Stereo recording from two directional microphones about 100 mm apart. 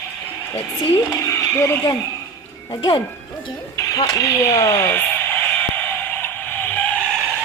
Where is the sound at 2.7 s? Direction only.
40° left (ahead or behind).